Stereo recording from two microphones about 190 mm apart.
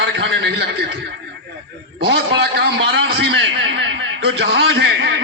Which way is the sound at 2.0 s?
60° right (ahead or behind).